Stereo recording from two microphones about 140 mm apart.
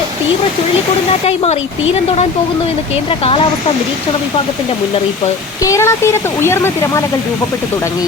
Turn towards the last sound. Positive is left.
turn(degrees=20)  # may be behind; listen again after turning